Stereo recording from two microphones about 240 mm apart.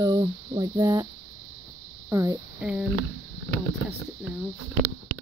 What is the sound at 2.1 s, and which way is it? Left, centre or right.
Speech, centre.